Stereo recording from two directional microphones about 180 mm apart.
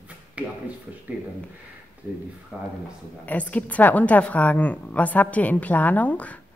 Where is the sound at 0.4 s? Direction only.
5° right (ahead or behind).